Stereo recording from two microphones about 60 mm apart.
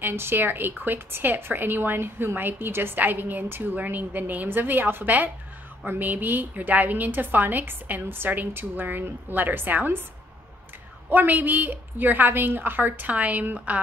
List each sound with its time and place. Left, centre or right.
0.0 s a woman's voice: right
11.1 s a woman's voice: right